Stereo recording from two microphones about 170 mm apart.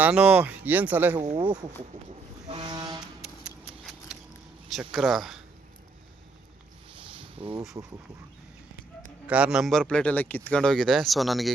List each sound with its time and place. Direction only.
0.0 s speech: 5° right (ahead or behind)
1.2 s speech: 40° right (ahead or behind)
2.5 s vehicle: 30° right (ahead or behind)
3.2 s scissors: 5° right (ahead or behind)
4.7 s speech: centre (ahead or behind)
7.2 s a sound: 35° right (ahead or behind)
9.2 s speech: 5° right (ahead or behind)